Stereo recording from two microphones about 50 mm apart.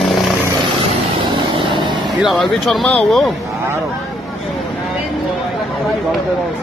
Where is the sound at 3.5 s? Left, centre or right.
Right.